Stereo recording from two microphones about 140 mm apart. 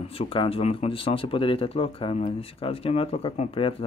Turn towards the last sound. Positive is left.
turn(degrees=40)  # may be behind; listen again after turning